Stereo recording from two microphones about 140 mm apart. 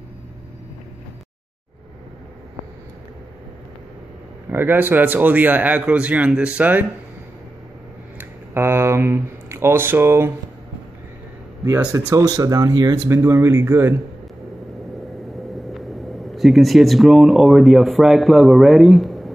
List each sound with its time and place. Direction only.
4.5 s a man's voice: 15° right (ahead or behind)
8.2 s a sound: 15° right (ahead or behind)
12.1 s a man's voice: 25° right (ahead or behind)
15.7 s speech: centre (ahead or behind)